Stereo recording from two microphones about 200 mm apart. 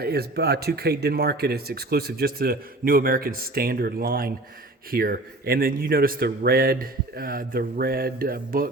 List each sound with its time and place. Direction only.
0.0 s speech: 50° right (ahead or behind)